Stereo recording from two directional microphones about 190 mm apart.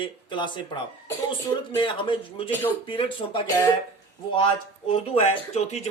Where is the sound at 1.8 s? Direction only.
25° left (ahead or behind).